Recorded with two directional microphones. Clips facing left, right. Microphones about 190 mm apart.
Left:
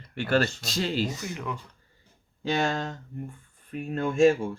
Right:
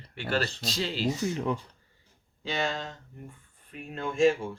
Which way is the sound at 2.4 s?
45° left (ahead or behind).